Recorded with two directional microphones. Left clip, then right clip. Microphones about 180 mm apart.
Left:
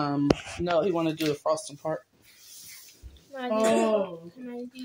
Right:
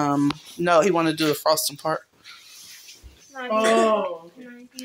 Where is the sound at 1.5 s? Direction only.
5° right (ahead or behind).